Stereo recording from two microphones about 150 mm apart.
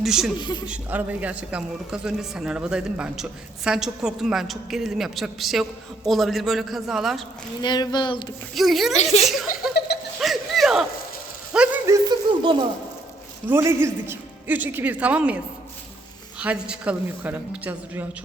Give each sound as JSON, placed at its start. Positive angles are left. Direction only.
{"t": 0.0, "sound": "speech", "side_deg": 0}
{"t": 0.3, "sound": "speech", "side_deg": 30}
{"t": 0.6, "sound": "speech", "side_deg": -10}
{"t": 7.6, "sound": "speech", "side_deg": 30}
{"t": 8.5, "sound": "speech", "side_deg": 0}
{"t": 9.0, "sound": "speech", "side_deg": 45}
{"t": 9.2, "sound": "speech", "side_deg": 0}
{"t": 10.2, "sound": "a sound", "side_deg": 0}
{"t": 11.9, "sound": "a sound", "side_deg": -30}
{"t": 13.5, "sound": "a woman's voice", "side_deg": -15}
{"t": 16.4, "sound": "a woman's voice", "side_deg": -10}